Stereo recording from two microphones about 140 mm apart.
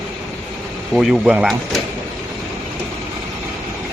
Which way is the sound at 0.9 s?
5° right (ahead or behind).